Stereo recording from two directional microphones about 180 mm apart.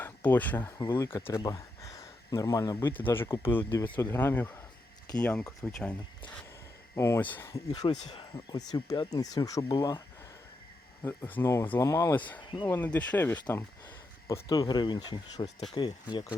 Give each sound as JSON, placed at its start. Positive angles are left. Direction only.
{"t": 0.0, "sound": "speech", "side_deg": 10}
{"t": 6.9, "sound": "speech", "side_deg": 15}
{"t": 11.0, "sound": "speech", "side_deg": 10}
{"t": 12.4, "sound": "speech", "side_deg": 25}
{"t": 12.6, "sound": "speech", "side_deg": 10}